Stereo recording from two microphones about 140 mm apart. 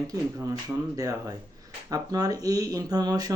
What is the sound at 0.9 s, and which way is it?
Speech, 25° right (ahead or behind).